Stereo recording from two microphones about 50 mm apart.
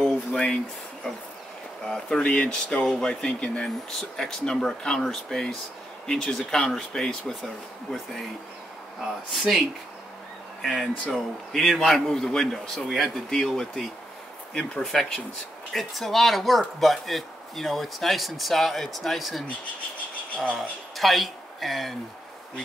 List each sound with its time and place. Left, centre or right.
0.0 s a sound: centre
1.9 s speech: centre
3.9 s speech: centre
6.3 s speech: centre
9.4 s speech: centre
14.5 s speech: centre
14.8 s speech: centre
20.5 s speech: centre